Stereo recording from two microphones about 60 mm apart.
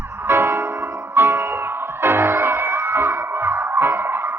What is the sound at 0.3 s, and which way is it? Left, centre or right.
Music, right.